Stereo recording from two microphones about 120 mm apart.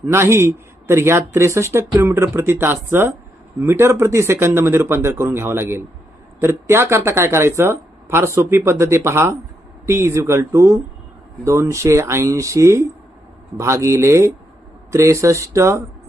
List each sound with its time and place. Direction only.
0.0 s speech: 20° right (ahead or behind)